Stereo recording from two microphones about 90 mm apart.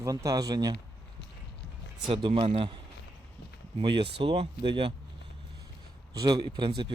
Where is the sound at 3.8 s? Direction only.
70° right (ahead or behind); by 4.5 s 85° right.